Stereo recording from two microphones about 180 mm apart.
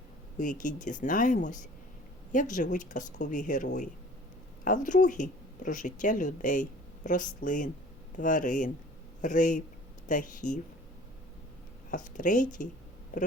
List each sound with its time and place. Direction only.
0.3 s speech: 45° left (ahead or behind)
11.9 s speech: 45° left (ahead or behind)